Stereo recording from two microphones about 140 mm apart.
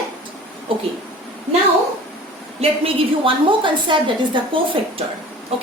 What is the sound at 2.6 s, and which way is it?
A woman's voice, 45° right (ahead or behind).